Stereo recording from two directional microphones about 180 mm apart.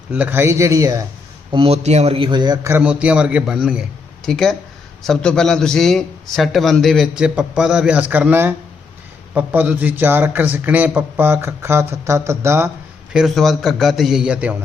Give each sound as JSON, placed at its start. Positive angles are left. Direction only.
{"t": 0.1, "sound": "a man's voice", "side_deg": -10}
{"t": 1.5, "sound": "speech", "side_deg": -35}
{"t": 2.7, "sound": "a man's voice", "side_deg": -5}
{"t": 13.1, "sound": "a man's voice", "side_deg": 0}